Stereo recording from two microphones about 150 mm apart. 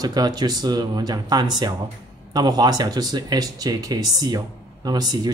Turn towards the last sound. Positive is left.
turn(degrees=-25)  # may be behind; listen again after turning